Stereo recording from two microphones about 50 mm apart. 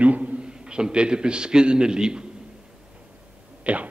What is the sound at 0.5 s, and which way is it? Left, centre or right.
A man's voice, centre.